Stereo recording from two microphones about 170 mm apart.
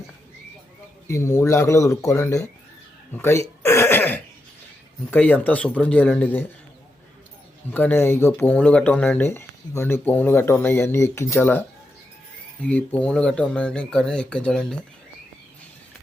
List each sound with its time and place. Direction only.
1.0 s speech: 15° left (ahead or behind)
7.7 s speech: 10° left (ahead or behind)
12.6 s speech: 10° left (ahead or behind)